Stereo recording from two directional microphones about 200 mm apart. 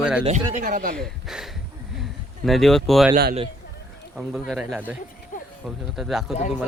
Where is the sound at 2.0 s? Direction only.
Centre (ahead or behind).